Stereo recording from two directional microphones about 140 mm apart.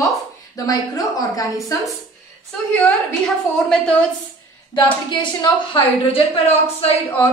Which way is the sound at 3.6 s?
5° left (ahead or behind).